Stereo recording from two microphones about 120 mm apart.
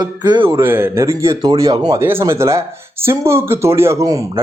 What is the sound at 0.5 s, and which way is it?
Speech, 20° right (ahead or behind).